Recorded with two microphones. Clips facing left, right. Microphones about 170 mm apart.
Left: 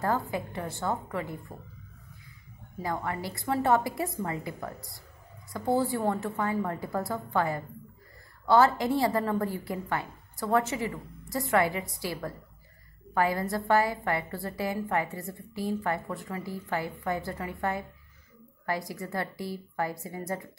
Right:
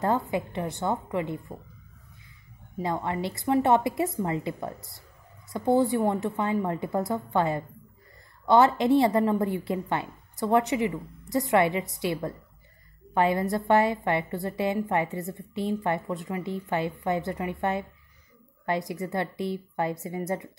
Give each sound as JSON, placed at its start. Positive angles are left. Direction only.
{"t": 0.0, "sound": "a woman's voice", "side_deg": -20}
{"t": 2.8, "sound": "a woman's voice", "side_deg": -25}